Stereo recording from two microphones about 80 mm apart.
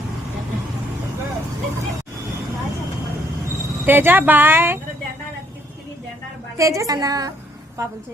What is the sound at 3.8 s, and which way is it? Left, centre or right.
Speech, right.